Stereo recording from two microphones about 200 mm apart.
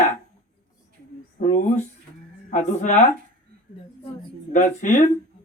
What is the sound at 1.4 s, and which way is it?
Speech, 40° left (ahead or behind).